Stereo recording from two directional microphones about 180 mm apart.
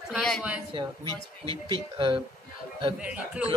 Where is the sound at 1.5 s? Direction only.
30° right (ahead or behind).